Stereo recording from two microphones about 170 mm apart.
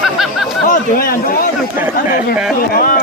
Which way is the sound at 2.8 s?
50° left (ahead or behind).